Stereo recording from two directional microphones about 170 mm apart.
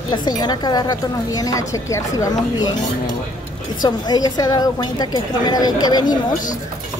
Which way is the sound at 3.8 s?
25° left (ahead or behind).